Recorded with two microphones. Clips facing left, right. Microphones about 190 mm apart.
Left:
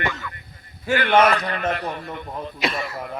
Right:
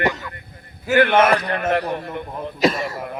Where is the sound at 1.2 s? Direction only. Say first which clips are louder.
Right 2 dB; 50° right (ahead or behind).